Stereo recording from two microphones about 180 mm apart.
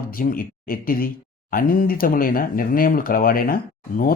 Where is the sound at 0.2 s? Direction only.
55° left (ahead or behind).